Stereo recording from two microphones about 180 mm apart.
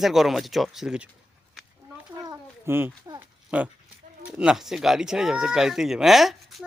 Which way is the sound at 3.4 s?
10° right (ahead or behind).